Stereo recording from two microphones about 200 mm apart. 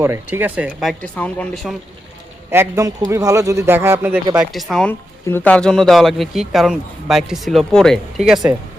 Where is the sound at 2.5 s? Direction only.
15° right (ahead or behind).